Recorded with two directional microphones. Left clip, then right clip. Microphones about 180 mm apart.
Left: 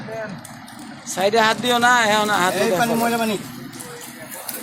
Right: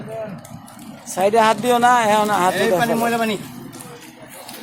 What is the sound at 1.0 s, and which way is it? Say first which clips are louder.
Speech: right 2 dB; 10° right (ahead or behind).